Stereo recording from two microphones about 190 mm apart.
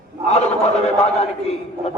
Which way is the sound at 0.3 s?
35° left (ahead or behind).